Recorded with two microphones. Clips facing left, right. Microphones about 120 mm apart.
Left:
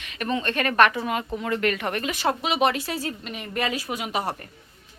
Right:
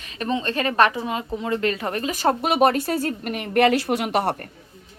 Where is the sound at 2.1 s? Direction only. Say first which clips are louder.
Right 6 dB; 45° right (ahead or behind); by 4.4 s 65° right (ahead or behind).